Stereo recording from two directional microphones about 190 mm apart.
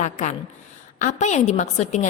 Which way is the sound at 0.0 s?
40° left (ahead or behind).